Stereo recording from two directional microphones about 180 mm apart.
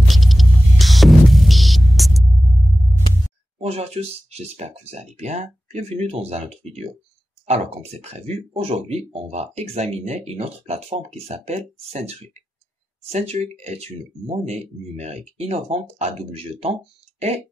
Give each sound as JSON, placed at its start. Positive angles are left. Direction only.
{"t": 0.1, "sound": "hum", "side_deg": 0}
{"t": 3.5, "sound": "speech", "side_deg": -35}